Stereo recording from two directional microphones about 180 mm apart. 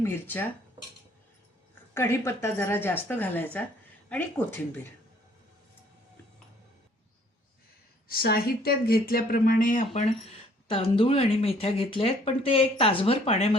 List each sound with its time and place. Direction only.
0.0 s speech: 10° left (ahead or behind)
1.9 s speech: 15° left (ahead or behind)
8.0 s speech: 55° left (ahead or behind)
10.7 s speech: 30° left (ahead or behind)